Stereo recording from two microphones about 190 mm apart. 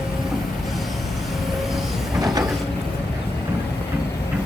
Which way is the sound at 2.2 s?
20° right (ahead or behind).